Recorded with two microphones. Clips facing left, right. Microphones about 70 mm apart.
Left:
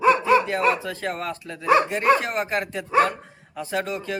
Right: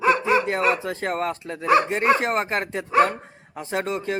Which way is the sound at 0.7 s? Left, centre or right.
Right.